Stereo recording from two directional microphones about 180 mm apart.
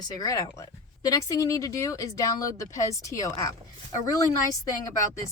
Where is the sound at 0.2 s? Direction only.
20° left (ahead or behind).